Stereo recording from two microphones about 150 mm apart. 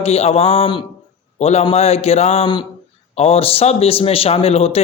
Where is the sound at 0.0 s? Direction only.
45° left (ahead or behind).